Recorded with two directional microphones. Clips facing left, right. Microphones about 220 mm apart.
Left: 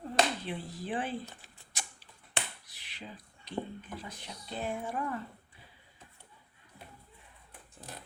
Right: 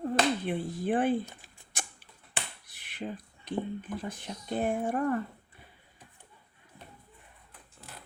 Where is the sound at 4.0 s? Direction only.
50° right (ahead or behind).